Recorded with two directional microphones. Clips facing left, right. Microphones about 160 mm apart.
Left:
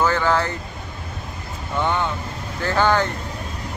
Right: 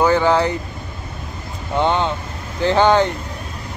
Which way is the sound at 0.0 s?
15° right (ahead or behind).